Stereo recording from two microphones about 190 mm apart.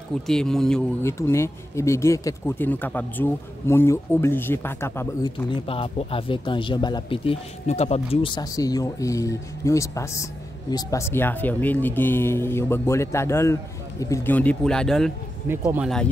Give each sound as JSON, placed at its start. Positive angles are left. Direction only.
{"t": 0.3, "sound": "speech", "side_deg": 5}
{"t": 1.0, "sound": "speech", "side_deg": 15}
{"t": 5.7, "sound": "speech", "side_deg": 30}
{"t": 15.4, "sound": "speech", "side_deg": -10}